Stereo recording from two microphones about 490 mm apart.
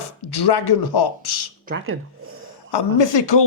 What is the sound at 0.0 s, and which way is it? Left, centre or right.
Speech, left.